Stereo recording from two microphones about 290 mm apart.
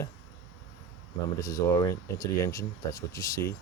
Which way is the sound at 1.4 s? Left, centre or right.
Centre.